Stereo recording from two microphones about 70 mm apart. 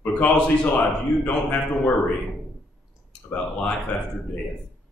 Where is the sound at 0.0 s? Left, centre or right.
Left.